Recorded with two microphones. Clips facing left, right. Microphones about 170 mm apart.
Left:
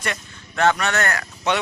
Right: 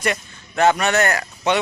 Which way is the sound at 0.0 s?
10° right (ahead or behind).